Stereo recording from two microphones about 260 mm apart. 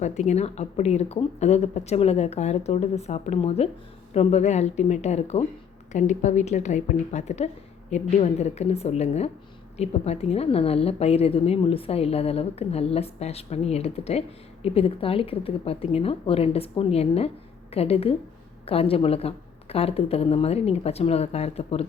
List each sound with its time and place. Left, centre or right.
0.0 s a woman's voice: left